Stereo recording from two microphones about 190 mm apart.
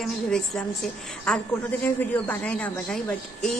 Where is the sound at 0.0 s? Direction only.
5° left (ahead or behind).